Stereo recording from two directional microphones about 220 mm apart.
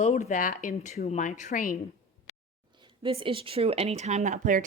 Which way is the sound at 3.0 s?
25° right (ahead or behind).